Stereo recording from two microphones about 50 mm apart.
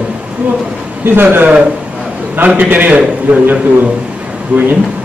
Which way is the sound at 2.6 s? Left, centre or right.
Right.